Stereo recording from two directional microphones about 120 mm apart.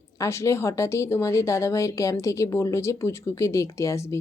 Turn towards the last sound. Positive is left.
turn(degrees=25)  # may be behind; listen again after turning